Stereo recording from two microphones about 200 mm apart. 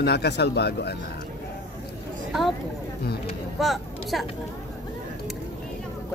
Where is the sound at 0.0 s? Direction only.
55° left (ahead or behind).